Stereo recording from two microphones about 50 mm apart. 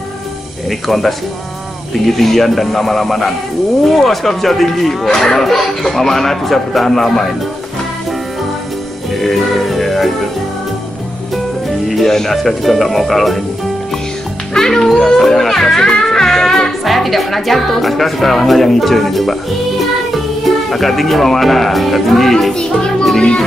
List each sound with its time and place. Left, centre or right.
0.7 s speech: centre
9.1 s music: centre
11.9 s speech: centre
14.5 s speech: centre
20.4 s speech: centre
22.5 s music: centre